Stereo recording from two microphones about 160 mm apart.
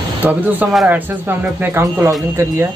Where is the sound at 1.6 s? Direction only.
15° right (ahead or behind).